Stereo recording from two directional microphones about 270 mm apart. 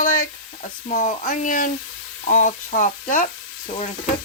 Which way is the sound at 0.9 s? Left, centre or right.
Left.